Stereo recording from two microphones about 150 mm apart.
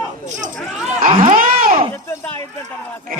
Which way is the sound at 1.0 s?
65° right (ahead or behind).